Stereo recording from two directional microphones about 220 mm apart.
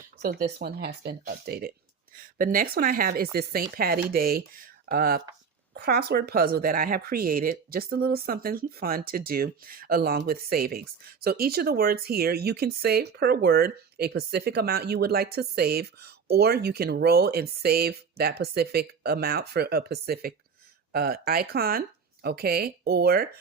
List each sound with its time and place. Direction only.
0.2 s speech: 40° right (ahead or behind)